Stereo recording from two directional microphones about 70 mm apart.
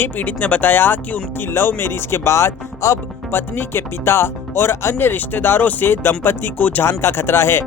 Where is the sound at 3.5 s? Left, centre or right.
Left.